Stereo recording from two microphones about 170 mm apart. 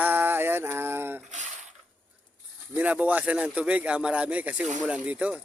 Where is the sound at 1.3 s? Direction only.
45° right (ahead or behind).